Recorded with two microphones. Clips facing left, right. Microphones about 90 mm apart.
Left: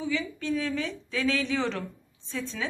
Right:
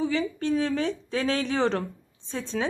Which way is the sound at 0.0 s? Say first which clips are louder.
Right 4 dB; 40° right (ahead or behind).